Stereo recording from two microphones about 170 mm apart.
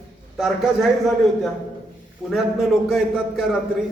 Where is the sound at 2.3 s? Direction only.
Centre (ahead or behind).